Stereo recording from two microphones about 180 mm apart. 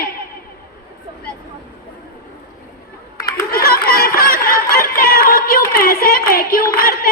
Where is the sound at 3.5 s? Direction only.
55° left (ahead or behind).